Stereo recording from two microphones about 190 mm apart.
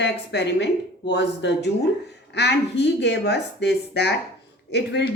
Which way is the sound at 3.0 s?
65° left (ahead or behind).